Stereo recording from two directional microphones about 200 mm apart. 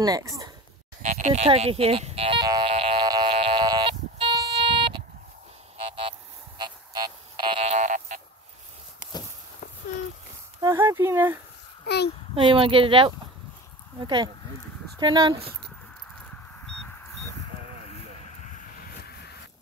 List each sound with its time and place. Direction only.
0.0 s speech: 15° right (ahead or behind)
1.0 s buzzer: 35° right (ahead or behind)
6.6 s a sound: 20° right (ahead or behind); by 8.2 s 40° right (ahead or behind)
10.6 s speech: 15° right (ahead or behind)
12.4 s speech: 25° right (ahead or behind)
19.0 s a sound: 55° left (ahead or behind)